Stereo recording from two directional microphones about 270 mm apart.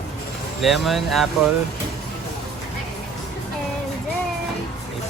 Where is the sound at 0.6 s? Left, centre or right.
Centre.